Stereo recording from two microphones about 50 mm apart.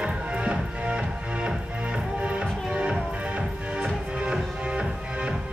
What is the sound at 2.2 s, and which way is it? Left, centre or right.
Music, right.